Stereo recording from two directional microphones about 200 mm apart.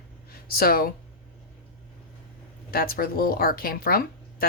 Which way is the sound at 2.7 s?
45° left (ahead or behind).